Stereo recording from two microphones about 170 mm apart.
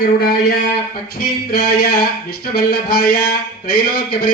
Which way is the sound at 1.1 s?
65° left (ahead or behind).